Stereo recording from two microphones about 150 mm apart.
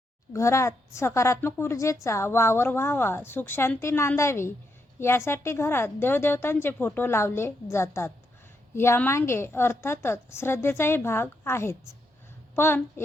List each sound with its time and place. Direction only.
0.3 s a woman's voice: 20° left (ahead or behind)